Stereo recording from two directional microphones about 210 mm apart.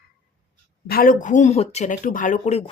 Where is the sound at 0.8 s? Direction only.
45° left (ahead or behind).